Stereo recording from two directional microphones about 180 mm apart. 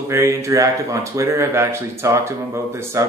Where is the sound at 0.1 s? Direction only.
15° right (ahead or behind).